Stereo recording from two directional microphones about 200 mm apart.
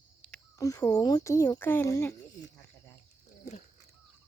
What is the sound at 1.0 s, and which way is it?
Speech, 15° left (ahead or behind).